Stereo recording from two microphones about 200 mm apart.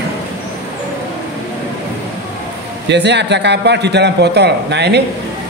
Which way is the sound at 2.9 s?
60° right (ahead or behind).